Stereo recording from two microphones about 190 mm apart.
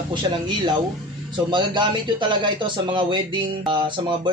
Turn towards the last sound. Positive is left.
turn(degrees=-25)  # may be behind; listen again after turning